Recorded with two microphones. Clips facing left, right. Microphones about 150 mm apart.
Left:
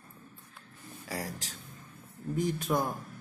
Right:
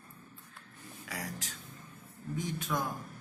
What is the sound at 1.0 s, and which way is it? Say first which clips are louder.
Speech: left 4 dB; 35° left (ahead or behind).